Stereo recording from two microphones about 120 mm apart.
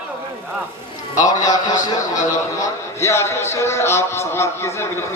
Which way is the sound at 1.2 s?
30° left (ahead or behind).